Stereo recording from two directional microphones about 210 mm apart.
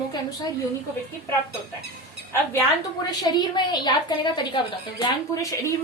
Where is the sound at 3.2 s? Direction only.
20° left (ahead or behind).